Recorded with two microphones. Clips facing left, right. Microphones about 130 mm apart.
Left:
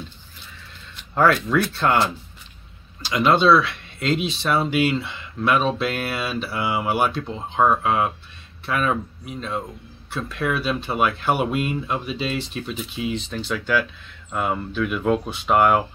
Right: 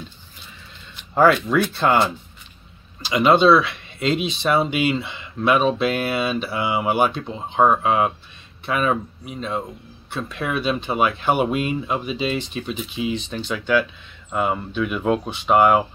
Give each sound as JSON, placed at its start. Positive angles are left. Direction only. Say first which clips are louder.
{"t": 1.1, "sound": "speech", "louder": "right 2 dB", "side_deg": -10}